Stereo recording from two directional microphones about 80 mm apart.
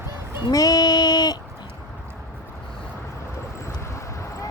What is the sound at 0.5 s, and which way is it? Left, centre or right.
Female singing, left.